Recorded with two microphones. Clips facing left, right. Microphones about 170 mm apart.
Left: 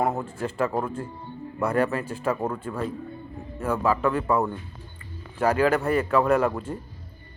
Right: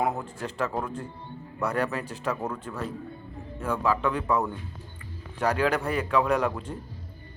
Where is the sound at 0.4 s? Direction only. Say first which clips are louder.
Left 4 dB; 10° left (ahead or behind).